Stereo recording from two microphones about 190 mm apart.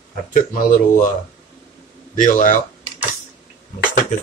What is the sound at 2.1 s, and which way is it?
Speech, 40° left (ahead or behind).